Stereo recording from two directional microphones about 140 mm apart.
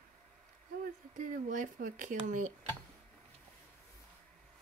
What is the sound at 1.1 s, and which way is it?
Speech, 65° right (ahead or behind).